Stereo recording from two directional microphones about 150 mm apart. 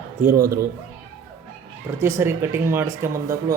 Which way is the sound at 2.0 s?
20° right (ahead or behind).